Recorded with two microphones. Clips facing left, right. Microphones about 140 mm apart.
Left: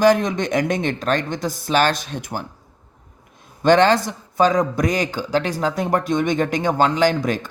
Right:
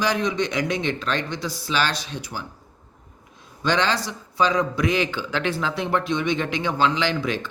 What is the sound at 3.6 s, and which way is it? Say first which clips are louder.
A man's voice: left 8 dB; 50° left (ahead or behind).